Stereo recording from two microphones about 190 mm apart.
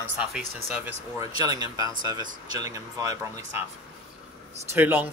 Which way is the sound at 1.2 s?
20° right (ahead or behind).